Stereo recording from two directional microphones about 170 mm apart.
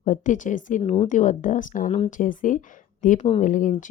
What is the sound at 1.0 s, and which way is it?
Speech, 45° left (ahead or behind).